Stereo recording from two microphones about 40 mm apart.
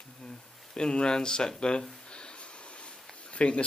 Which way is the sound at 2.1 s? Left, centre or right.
Left.